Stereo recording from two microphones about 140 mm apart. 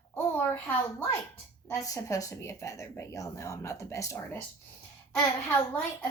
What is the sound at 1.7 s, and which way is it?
A child's voice, 25° left (ahead or behind).